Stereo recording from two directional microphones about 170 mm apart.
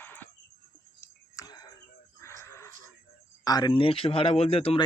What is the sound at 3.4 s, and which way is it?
Speech, 25° left (ahead or behind).